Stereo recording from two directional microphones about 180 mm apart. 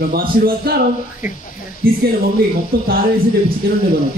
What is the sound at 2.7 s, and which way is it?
Speech, 55° right (ahead or behind).